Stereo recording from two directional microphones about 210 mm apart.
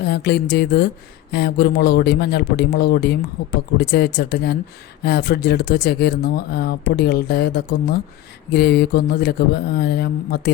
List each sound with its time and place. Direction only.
0.0 s speech: 50° left (ahead or behind)